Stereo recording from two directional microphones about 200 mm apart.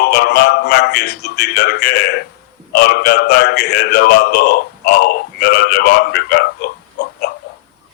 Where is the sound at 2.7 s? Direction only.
50° left (ahead or behind).